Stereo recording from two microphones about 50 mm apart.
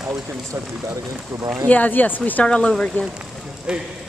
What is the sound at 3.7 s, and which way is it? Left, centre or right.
Speech, centre.